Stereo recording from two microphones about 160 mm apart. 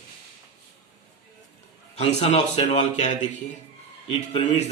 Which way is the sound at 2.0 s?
40° left (ahead or behind).